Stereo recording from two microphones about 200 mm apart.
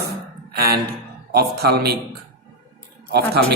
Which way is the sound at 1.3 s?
55° right (ahead or behind).